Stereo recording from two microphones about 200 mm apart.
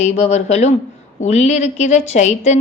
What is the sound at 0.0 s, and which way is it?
A woman's voice, 35° left (ahead or behind).